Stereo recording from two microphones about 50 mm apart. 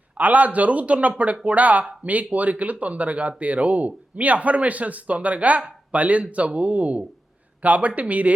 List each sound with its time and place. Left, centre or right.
0.2 s speech: right